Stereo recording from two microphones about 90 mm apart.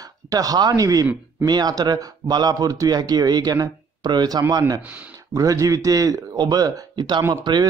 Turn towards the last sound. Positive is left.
turn(degrees=-55)  # may be behind; listen again after turning